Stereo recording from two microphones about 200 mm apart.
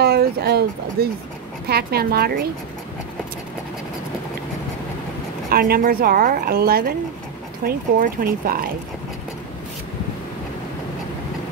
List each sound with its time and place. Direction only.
0.0 s a sound: 50° right (ahead or behind)
1.7 s speech: 50° right (ahead or behind)
5.5 s speech: 50° right (ahead or behind)